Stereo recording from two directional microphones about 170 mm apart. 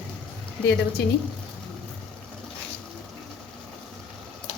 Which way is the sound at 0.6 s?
90° left.